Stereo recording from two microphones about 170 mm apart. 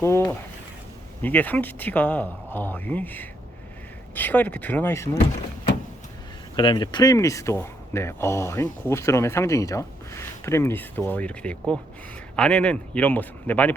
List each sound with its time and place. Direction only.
0.0 s speech: 15° left (ahead or behind)
6.6 s speech: 25° left (ahead or behind); by 13.7 s 10° left (ahead or behind)